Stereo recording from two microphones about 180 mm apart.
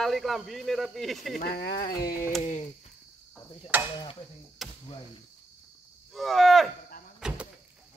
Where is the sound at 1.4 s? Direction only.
60° left (ahead or behind).